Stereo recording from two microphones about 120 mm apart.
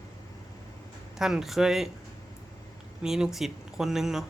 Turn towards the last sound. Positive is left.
turn(degrees=-5)  # may be behind; listen again after turning